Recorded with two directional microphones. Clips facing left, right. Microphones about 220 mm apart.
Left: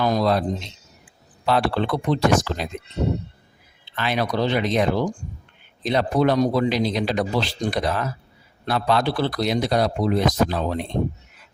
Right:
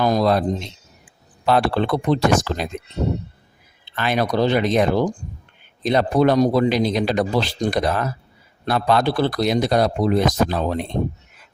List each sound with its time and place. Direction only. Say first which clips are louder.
0.0 s speech: right 2 dB; 45° right (ahead or behind)
1.5 s speech: right 3 dB; 45° right (ahead or behind)
3.9 s speech: right 3 dB; 50° right (ahead or behind)